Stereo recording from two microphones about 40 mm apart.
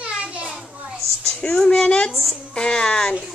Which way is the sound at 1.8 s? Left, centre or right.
Left.